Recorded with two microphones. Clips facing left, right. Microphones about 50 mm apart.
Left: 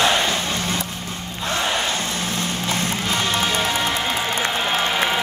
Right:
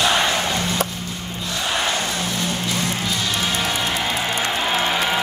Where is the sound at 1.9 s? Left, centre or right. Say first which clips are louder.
Right 1 dB; left.